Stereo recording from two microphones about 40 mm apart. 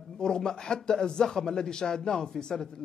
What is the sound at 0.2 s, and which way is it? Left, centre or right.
Speech, centre.